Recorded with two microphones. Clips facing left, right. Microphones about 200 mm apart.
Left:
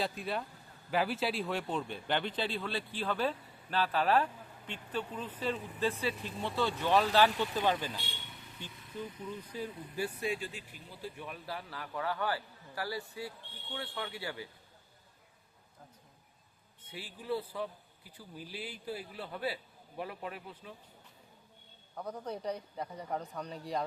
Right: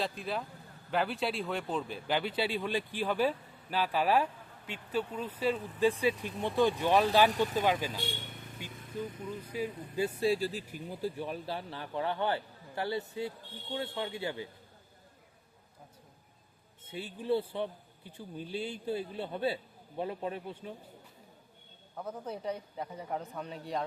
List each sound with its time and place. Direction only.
0.0 s a man's voice: centre (ahead or behind)
7.3 s speech: 45° right (ahead or behind)
7.6 s speech: 10° right (ahead or behind)
9.5 s speech: 10° right (ahead or behind)
10.0 s speech: 25° right (ahead or behind); by 11.1 s 50° right (ahead or behind)
11.1 s a man's voice: 30° right (ahead or behind)
16.8 s a man's voice: 25° right (ahead or behind)
21.9 s a man's voice: 5° right (ahead or behind)